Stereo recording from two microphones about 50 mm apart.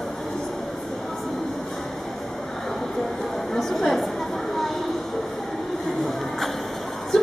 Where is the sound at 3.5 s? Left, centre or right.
Centre.